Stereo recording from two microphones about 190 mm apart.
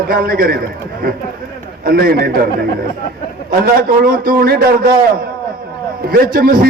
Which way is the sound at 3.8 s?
50° right (ahead or behind).